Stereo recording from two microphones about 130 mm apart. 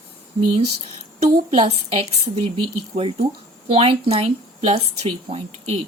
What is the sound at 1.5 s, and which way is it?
Speech, 45° right (ahead or behind).